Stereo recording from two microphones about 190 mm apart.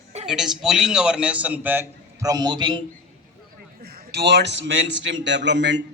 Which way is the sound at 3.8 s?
55° right (ahead or behind).